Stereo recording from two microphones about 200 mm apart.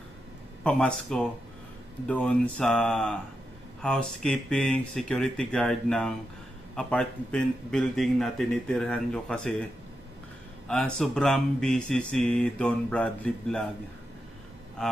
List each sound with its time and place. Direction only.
0.7 s speech: 5° left (ahead or behind)
10.7 s speech: 5° left (ahead or behind)